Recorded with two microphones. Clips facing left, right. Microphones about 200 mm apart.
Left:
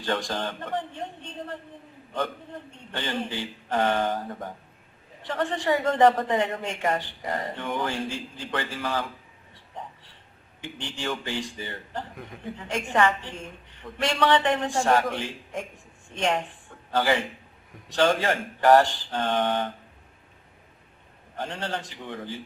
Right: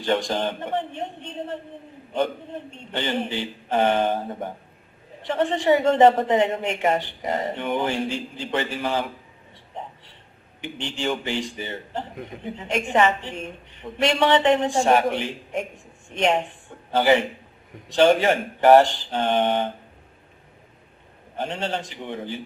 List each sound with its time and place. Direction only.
0.0 s a man's voice: 20° right (ahead or behind)
9.7 s a sound: 25° right (ahead or behind)
10.9 s a man's voice: 20° right (ahead or behind)
21.3 s a man's voice: 25° right (ahead or behind)